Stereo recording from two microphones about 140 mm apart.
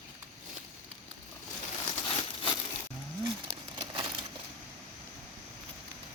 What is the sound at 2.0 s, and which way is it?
Crumpling, 40° left (ahead or behind).